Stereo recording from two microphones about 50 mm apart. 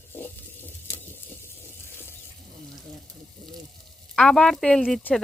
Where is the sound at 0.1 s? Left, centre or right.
Left.